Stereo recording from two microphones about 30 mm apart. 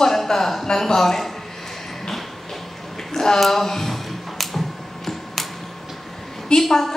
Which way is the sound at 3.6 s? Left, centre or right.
Centre.